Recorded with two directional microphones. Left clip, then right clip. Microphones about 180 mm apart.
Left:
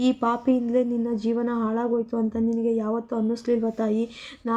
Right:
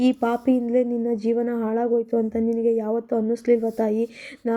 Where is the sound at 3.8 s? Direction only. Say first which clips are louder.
Right 3 dB; 15° right (ahead or behind).